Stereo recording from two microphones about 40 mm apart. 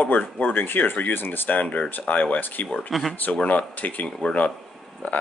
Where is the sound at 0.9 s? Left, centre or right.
Left.